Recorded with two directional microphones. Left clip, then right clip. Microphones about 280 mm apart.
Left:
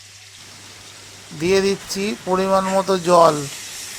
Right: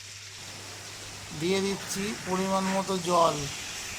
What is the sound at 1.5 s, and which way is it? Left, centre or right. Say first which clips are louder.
Speech: left 11 dB; left.